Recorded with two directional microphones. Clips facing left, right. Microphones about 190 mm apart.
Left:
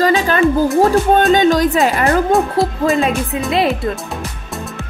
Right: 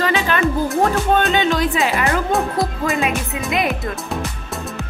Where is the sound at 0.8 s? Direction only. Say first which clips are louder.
Left 4 dB; 40° left (ahead or behind).